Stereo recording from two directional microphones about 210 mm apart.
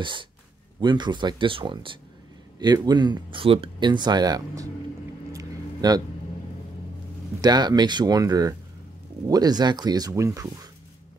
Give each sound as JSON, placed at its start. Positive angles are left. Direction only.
{"t": 0.0, "sound": "speech", "side_deg": -20}
{"t": 5.3, "sound": "a sound", "side_deg": -15}
{"t": 7.4, "sound": "speech", "side_deg": -20}